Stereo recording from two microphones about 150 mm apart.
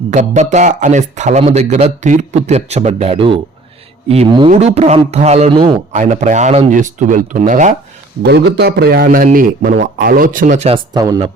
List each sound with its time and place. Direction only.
0.1 s speech: 50° right (ahead or behind)
4.4 s speech: 45° right (ahead or behind)
5.5 s a man's voice: 35° right (ahead or behind)
5.9 s speech: 50° right (ahead or behind)
8.2 s a man's voice: 90° right
9.0 s speech: 65° right (ahead or behind)
10.9 s speech: 25° right (ahead or behind)